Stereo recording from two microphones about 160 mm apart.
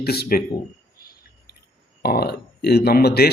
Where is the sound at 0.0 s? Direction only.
80° left.